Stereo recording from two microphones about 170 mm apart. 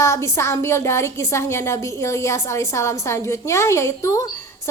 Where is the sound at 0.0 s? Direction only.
15° left (ahead or behind).